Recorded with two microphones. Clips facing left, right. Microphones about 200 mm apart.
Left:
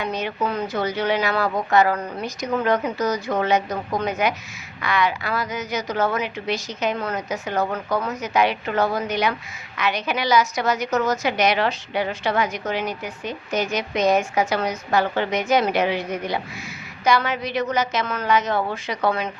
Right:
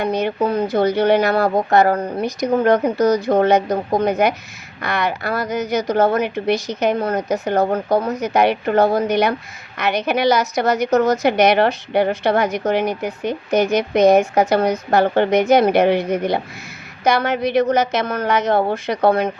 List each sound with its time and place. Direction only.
0.0 s a woman's voice: 60° right (ahead or behind)
0.3 s speech: 30° right (ahead or behind)
0.7 s a woman's voice: 60° right (ahead or behind)
2.0 s a woman's voice: 30° right (ahead or behind)
2.6 s a woman's voice: 60° right (ahead or behind)
7.6 s speech: 30° right (ahead or behind)
8.2 s a woman's voice: 60° right (ahead or behind)